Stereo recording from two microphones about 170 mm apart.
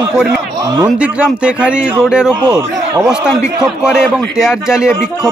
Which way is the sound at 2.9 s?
5° right (ahead or behind).